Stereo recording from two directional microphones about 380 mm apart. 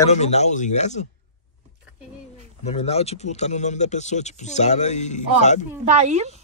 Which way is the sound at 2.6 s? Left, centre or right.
Centre.